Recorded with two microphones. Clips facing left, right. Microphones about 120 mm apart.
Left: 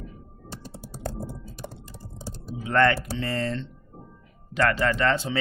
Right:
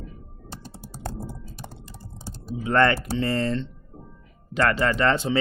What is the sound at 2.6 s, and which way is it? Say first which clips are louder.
Speech: right 1 dB; 35° right (ahead or behind).